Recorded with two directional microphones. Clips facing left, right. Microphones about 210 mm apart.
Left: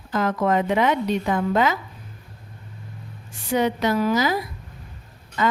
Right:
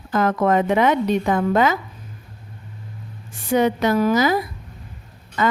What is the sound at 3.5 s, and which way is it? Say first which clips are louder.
Speech: right 3 dB; 50° right (ahead or behind).